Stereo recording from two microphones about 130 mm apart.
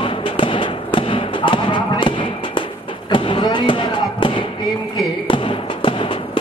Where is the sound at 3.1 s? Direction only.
40° left (ahead or behind).